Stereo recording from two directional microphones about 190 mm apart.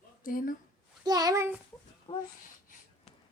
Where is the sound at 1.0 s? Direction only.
20° right (ahead or behind).